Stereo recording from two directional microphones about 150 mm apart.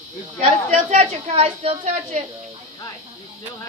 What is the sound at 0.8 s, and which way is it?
A woman's voice, 50° right (ahead or behind).